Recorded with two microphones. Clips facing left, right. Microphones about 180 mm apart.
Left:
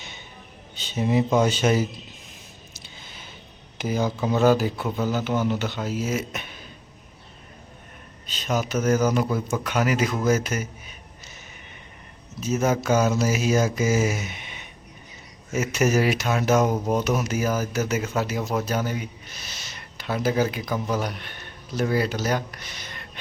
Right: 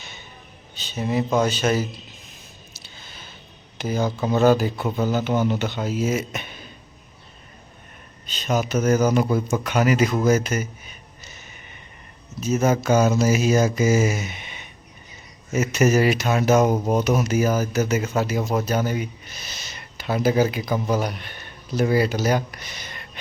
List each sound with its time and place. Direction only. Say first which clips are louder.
0.8 s speech: left 2 dB; 20° left (ahead or behind)
3.0 s a sound: right 1 dB; 20° left (ahead or behind)
3.8 s speech: right 1 dB; 10° left (ahead or behind)
8.3 s speech: right 3 dB; centre (ahead or behind)
12.4 s speech: right 2 dB; centre (ahead or behind)